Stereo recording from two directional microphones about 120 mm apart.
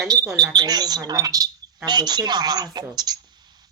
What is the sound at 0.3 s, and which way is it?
Speech, 35° right (ahead or behind).